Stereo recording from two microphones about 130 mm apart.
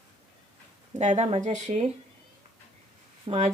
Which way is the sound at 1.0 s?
65° right (ahead or behind).